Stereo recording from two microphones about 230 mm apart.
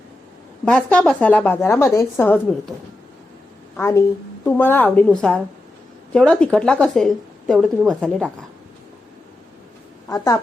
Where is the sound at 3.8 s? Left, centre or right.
Centre.